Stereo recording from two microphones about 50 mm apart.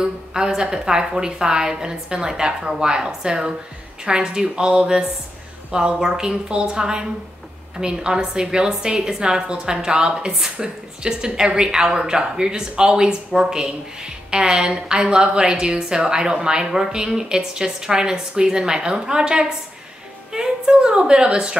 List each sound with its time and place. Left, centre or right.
0.0 s a woman's voice: centre